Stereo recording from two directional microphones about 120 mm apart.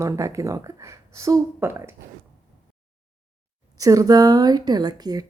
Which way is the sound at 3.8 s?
30° right (ahead or behind).